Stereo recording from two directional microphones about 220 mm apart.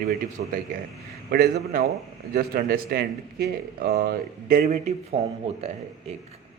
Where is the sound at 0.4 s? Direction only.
45° right (ahead or behind).